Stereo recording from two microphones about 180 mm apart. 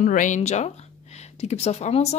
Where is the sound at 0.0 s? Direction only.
45° left (ahead or behind).